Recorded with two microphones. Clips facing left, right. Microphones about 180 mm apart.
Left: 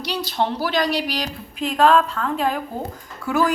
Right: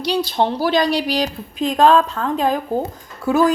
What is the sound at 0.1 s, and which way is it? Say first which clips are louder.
A woman's voice: right 5 dB; 20° right (ahead or behind).